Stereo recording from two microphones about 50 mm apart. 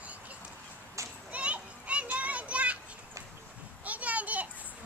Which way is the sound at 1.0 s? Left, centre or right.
Right.